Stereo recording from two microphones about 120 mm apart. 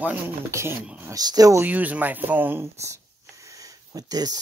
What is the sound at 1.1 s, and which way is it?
Speech, 30° right (ahead or behind).